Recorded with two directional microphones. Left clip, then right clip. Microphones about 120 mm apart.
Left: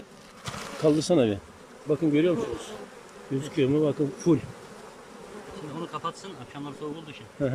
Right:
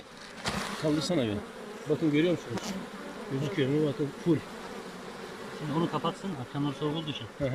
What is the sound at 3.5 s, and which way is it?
Speech, 15° left (ahead or behind).